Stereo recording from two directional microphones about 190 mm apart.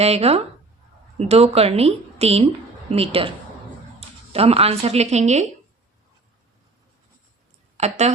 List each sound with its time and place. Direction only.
0.0 s speech: 35° right (ahead or behind)
7.8 s a woman's voice: 35° right (ahead or behind)